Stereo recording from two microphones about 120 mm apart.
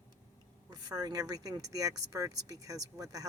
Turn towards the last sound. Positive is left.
turn(degrees=-30)  # may be behind; listen again after turning